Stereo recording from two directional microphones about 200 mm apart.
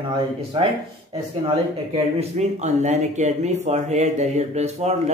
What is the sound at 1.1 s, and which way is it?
Speech, 30° right (ahead or behind).